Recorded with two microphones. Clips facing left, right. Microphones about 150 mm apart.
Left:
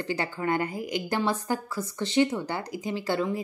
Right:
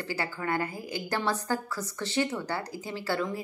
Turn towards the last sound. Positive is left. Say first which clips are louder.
# left 3 dB
turn(degrees=20)  # may be behind; listen again after turning